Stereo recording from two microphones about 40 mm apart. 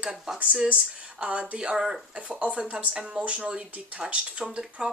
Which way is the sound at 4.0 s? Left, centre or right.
Centre.